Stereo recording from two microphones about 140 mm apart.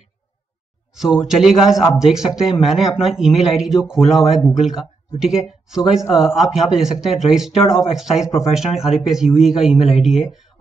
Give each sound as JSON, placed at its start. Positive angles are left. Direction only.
{"t": 0.9, "sound": "speech", "side_deg": -5}